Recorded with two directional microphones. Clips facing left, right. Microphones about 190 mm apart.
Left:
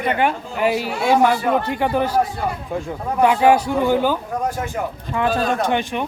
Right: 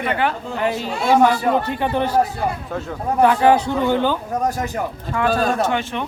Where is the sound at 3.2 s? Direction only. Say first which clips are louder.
Even; 10° left (ahead or behind).